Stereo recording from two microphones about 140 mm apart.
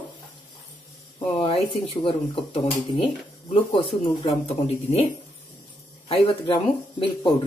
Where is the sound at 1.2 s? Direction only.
40° left (ahead or behind).